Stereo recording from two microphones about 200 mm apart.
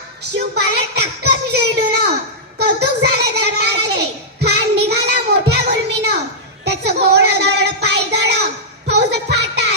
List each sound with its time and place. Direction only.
0.3 s a sound: 55° right (ahead or behind)
6.7 s child singing: 55° right (ahead or behind)
8.9 s music: 55° right (ahead or behind)